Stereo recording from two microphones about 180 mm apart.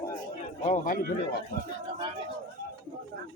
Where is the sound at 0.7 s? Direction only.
45° left (ahead or behind).